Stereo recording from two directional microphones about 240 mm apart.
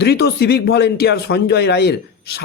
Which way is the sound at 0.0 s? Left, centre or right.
Left.